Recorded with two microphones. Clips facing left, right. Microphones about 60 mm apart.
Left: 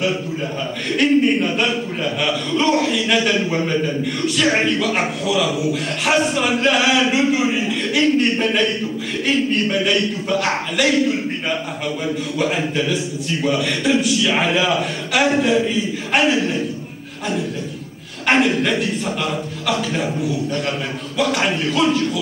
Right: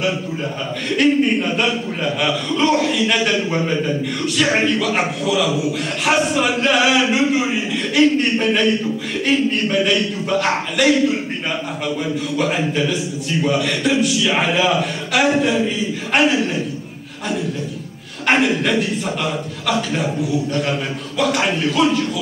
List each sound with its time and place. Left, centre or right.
0.9 s a man's voice: centre
12.4 s a man's voice: centre
18.2 s a man's voice: centre
21.6 s a man's voice: centre